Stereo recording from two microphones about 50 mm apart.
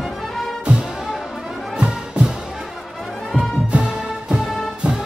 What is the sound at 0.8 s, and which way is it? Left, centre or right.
Music, centre.